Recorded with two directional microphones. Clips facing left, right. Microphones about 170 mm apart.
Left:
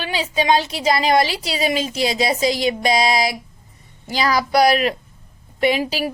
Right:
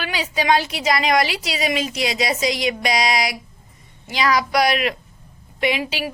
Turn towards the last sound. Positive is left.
turn(degrees=40)  # may be behind; listen again after turning